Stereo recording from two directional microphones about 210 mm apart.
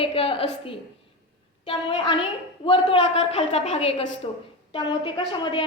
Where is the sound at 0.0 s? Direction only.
25° left (ahead or behind).